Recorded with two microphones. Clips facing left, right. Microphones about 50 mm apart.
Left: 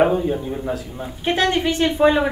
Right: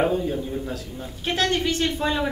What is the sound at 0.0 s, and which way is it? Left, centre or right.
A man's voice, left.